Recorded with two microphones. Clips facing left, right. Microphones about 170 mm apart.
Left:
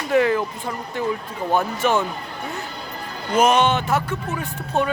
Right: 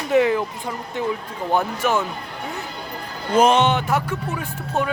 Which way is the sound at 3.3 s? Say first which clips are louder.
Right 1 dB; 30° right (ahead or behind).